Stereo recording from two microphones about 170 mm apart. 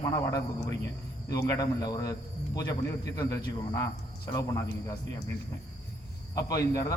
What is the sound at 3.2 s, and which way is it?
A man's voice, 20° left (ahead or behind).